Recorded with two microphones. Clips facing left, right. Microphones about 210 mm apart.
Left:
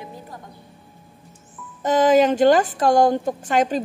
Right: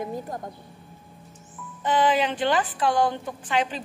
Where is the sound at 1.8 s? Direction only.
45° left (ahead or behind).